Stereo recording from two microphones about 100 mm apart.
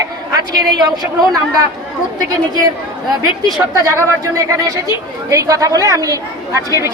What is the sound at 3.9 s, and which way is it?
A woman's voice, 35° right (ahead or behind).